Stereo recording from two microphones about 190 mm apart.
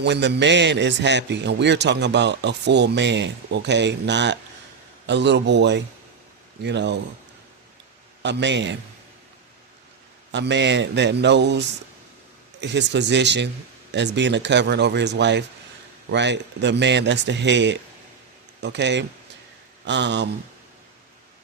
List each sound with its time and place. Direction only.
0.0 s a man's voice: 65° right (ahead or behind)
8.2 s speech: 65° right (ahead or behind)
10.3 s speech: 70° right (ahead or behind)